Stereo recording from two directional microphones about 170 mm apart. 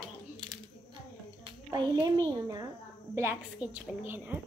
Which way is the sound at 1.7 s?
20° right (ahead or behind).